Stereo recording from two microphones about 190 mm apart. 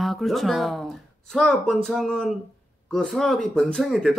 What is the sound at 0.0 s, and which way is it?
Speech, centre (ahead or behind).